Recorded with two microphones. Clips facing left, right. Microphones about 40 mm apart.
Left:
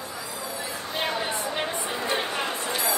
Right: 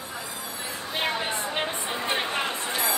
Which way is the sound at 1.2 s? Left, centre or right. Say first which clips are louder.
Even; right.